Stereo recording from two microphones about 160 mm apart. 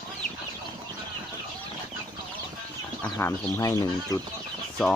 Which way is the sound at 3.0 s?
15° left (ahead or behind).